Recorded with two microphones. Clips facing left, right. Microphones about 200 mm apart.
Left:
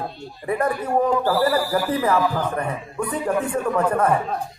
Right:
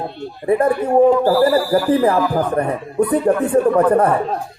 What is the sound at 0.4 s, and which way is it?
Speech, 30° right (ahead or behind).